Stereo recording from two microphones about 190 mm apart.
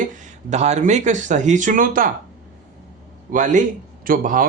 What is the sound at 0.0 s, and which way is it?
Speech, 40° right (ahead or behind).